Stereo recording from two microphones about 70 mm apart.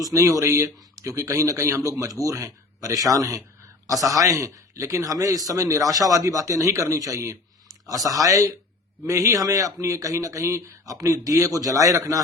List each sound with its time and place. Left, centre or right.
0.0 s a man's voice: right